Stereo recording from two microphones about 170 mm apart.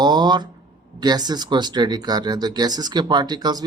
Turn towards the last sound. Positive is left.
turn(degrees=-25)  # may be behind; listen again after turning